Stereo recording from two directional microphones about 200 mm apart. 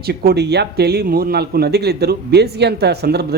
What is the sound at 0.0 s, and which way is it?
A man's voice, 50° right (ahead or behind).